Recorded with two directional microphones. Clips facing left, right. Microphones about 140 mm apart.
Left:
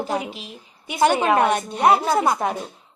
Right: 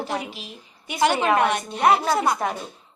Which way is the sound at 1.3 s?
20° left (ahead or behind).